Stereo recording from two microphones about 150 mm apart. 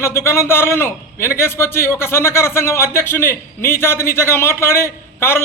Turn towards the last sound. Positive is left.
turn(degrees=15)  # may be behind; listen again after turning